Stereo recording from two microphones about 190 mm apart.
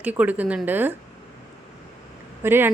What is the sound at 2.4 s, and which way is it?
Speech, 10° right (ahead or behind).